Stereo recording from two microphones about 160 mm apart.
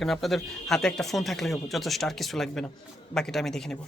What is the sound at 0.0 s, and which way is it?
Speech, centre (ahead or behind).